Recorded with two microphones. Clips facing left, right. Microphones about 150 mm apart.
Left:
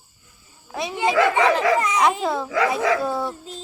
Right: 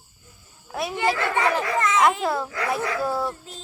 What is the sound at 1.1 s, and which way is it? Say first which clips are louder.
Speech: left 5 dB; 90° left.